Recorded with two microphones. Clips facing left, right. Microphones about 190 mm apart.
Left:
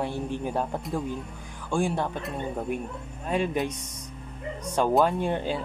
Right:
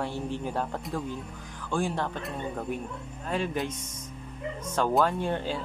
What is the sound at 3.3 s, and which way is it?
Speech, 15° left (ahead or behind).